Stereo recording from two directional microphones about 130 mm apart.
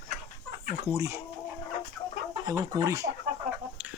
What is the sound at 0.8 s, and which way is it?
Speech, 20° right (ahead or behind).